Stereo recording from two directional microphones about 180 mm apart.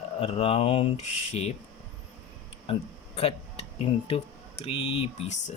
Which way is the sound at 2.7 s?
35° left (ahead or behind).